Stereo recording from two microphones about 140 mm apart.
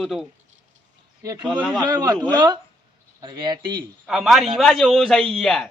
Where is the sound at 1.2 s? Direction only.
25° right (ahead or behind).